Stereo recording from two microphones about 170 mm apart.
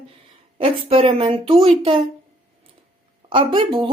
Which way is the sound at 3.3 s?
30° right (ahead or behind).